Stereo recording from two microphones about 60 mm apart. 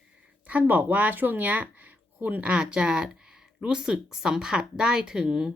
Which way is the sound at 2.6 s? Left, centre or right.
Centre.